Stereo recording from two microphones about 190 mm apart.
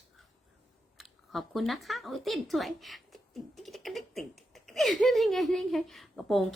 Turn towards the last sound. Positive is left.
turn(degrees=0)  # may be behind; listen again after turning